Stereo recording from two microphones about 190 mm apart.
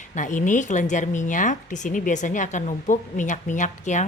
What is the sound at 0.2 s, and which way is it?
A woman's voice, 40° left (ahead or behind).